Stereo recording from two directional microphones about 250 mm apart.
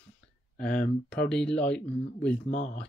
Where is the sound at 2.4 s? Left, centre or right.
Left.